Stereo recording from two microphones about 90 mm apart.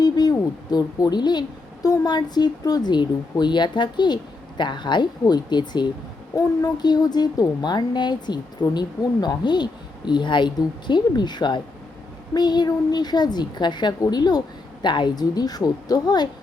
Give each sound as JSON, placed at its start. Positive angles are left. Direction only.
{"t": 0.0, "sound": "a woman's voice", "side_deg": 45}